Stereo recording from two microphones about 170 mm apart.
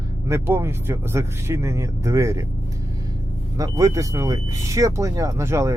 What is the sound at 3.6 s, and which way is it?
Speech, 20° right (ahead or behind).